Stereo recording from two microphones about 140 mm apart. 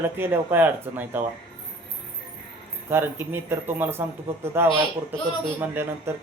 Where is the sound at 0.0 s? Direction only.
15° right (ahead or behind).